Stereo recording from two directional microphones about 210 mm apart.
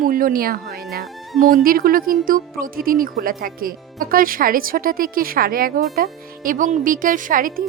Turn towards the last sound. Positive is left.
turn(degrees=-40)  # may be behind; listen again after turning